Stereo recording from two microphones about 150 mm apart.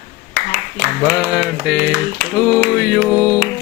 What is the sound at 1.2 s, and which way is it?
Mantra, 5° right (ahead or behind).